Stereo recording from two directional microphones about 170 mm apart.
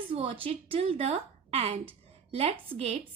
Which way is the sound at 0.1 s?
35° right (ahead or behind).